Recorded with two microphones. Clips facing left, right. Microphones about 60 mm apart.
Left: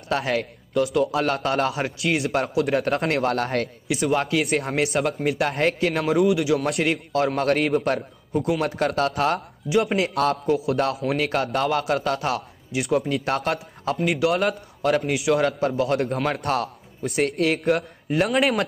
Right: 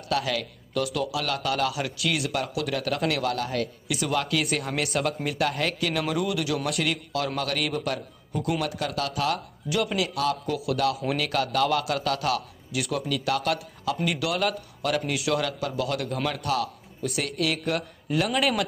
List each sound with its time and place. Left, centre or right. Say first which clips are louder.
0.1 s a man's voice: left 3 dB; left
0.7 s a man's voice: left 6 dB; left
1.1 s a man's voice: left 5 dB; left
3.9 s a man's voice: left 5 dB; left
10.4 s a man's voice: left 4 dB; left